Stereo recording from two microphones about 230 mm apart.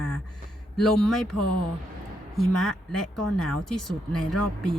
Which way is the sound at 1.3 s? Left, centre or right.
Left.